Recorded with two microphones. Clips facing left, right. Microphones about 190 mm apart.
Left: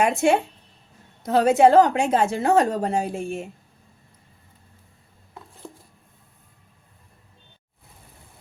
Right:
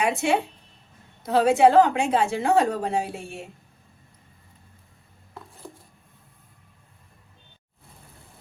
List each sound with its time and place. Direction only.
0.0 s a woman's voice: 45° left (ahead or behind)